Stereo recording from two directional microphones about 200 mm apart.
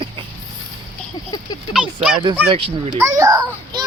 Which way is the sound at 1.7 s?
5° right (ahead or behind).